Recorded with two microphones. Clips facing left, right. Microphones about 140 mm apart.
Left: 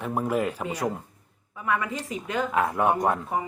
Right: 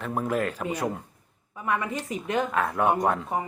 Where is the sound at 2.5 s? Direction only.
10° left (ahead or behind).